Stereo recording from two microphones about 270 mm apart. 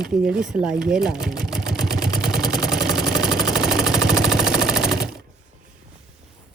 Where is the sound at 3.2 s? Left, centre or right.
Centre.